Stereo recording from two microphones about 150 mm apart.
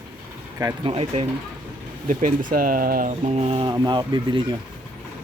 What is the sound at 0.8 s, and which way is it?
Speech, 40° right (ahead or behind).